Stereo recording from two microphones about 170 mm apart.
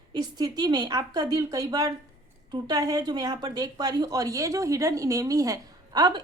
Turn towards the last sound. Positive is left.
turn(degrees=-25)  # may be behind; listen again after turning